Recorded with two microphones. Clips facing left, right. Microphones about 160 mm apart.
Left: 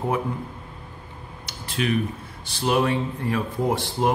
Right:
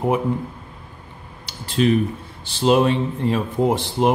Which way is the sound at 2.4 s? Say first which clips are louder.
Right 6 dB; 25° right (ahead or behind).